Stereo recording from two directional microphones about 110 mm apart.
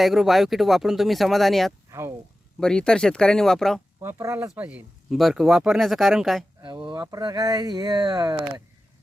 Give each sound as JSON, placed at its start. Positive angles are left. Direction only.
{"t": 0.0, "sound": "speech", "side_deg": 0}
{"t": 1.9, "sound": "speech", "side_deg": -25}
{"t": 2.6, "sound": "speech", "side_deg": 5}
{"t": 4.0, "sound": "speech", "side_deg": -25}
{"t": 5.1, "sound": "speech", "side_deg": 0}
{"t": 6.6, "sound": "speech", "side_deg": -45}